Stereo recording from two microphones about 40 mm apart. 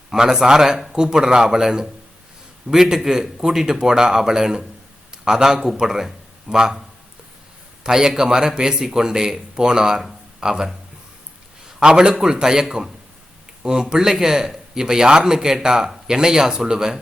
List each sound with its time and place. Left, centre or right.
0.1 s a man's voice: centre
7.9 s a man's voice: centre
11.8 s a man's voice: right